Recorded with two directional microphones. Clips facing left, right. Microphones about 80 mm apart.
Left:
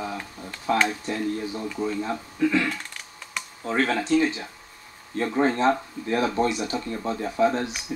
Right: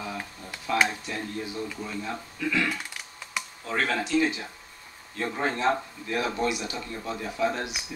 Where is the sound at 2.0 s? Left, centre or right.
Left.